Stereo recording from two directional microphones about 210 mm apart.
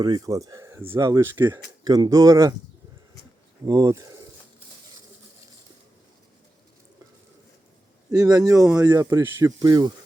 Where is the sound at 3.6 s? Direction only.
15° right (ahead or behind).